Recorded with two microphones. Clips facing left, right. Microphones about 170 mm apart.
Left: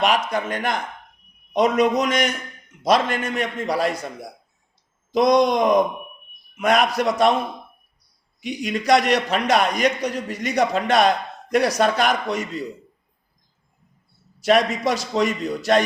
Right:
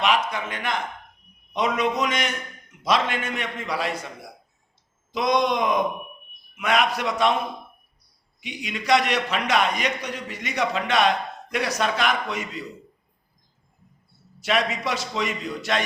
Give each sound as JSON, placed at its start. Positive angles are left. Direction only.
{"t": 0.0, "sound": "a man's voice", "side_deg": 40}
{"t": 5.1, "sound": "a man's voice", "side_deg": 40}
{"t": 8.4, "sound": "a man's voice", "side_deg": 45}
{"t": 14.4, "sound": "a man's voice", "side_deg": 40}